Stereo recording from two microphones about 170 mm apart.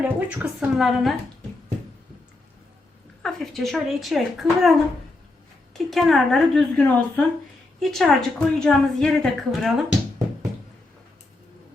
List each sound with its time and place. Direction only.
0.0 s a woman's voice: 5° right (ahead or behind)
3.2 s a woman's voice: centre (ahead or behind)